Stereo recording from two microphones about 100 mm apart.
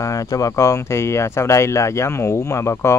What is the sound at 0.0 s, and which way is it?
Speech, 35° left (ahead or behind).